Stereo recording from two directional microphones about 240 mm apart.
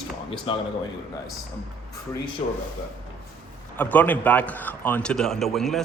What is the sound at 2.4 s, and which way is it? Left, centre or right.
Speech, left.